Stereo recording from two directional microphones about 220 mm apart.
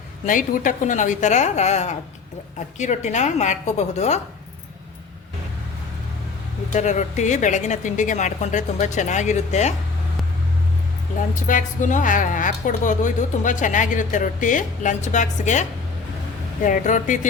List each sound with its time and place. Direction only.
0.3 s a woman's voice: 35° left (ahead or behind)
6.7 s a woman's voice: 35° left (ahead or behind)
11.4 s a woman's voice: 35° left (ahead or behind)
16.6 s a woman's voice: 35° left (ahead or behind)